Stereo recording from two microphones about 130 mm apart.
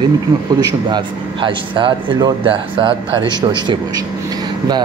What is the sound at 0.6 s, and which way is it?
A man's voice, 30° right (ahead or behind).